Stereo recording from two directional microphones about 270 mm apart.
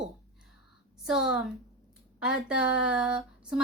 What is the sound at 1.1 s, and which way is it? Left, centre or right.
A woman's voice, centre.